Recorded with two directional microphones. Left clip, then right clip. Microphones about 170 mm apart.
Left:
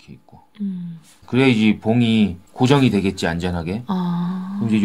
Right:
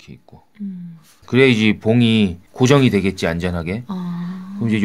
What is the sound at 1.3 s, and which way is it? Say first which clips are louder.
Speech: right 3 dB; 55° right (ahead or behind).